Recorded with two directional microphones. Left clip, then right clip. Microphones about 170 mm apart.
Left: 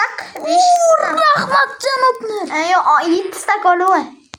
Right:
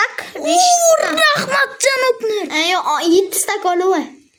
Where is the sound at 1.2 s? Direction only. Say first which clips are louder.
Left 2 dB; 40° right (ahead or behind).